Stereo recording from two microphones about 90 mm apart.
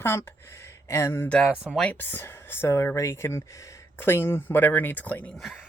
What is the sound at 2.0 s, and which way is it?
Speech, 25° left (ahead or behind).